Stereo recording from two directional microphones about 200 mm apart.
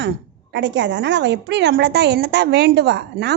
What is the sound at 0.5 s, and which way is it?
A woman's voice, 60° right (ahead or behind).